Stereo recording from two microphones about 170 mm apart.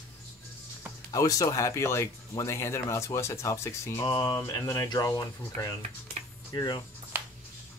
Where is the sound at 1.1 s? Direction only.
20° left (ahead or behind).